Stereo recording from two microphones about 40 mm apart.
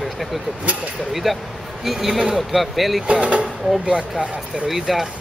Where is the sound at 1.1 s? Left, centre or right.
Centre.